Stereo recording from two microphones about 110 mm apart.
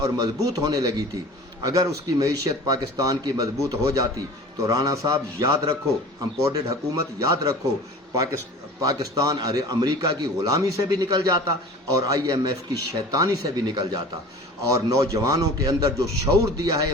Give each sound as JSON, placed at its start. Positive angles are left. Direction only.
{"t": 0.0, "sound": "a man's voice", "side_deg": -35}